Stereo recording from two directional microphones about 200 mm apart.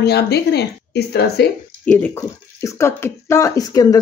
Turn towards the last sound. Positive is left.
turn(degrees=20)  # may be behind; listen again after turning